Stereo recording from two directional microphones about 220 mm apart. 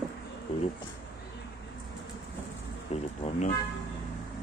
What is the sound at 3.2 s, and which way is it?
Toot, 30° left (ahead or behind).